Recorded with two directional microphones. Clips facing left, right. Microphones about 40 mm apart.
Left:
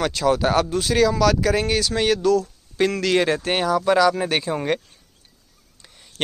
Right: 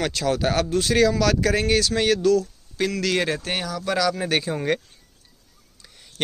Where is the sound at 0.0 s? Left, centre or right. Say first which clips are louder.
Left 3 dB; centre.